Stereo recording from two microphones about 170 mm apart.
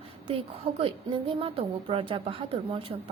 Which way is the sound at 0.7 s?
30° right (ahead or behind).